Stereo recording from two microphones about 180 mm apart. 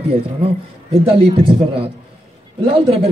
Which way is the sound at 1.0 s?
30° right (ahead or behind).